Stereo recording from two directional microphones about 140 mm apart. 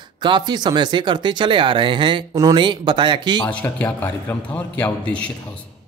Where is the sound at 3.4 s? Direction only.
10° left (ahead or behind).